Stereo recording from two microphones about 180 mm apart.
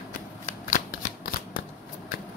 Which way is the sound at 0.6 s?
50° left (ahead or behind).